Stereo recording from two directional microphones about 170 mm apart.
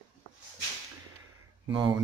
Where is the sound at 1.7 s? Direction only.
25° right (ahead or behind).